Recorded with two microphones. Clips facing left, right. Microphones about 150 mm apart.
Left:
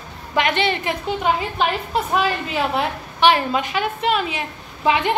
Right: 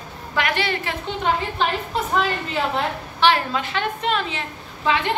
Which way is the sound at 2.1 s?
10° left (ahead or behind).